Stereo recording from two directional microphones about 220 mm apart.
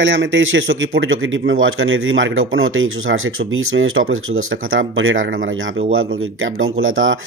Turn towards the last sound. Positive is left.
turn(degrees=-65)  # may be behind; listen again after turning